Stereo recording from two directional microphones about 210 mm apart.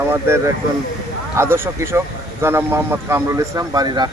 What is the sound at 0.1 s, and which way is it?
Speech, 10° right (ahead or behind).